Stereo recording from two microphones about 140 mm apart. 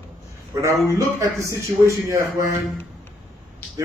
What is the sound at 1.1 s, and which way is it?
A man's voice, 20° right (ahead or behind).